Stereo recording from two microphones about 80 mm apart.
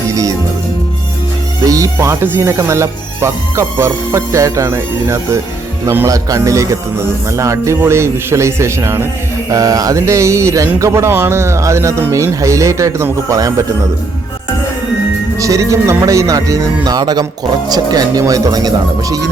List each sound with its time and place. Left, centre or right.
1.6 s music: right
2.2 s speech: right
6.1 s speech: right
9.5 s speech: right
15.4 s speech: right